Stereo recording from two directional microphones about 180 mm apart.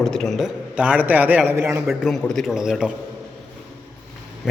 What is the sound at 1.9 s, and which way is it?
A man's voice, centre (ahead or behind).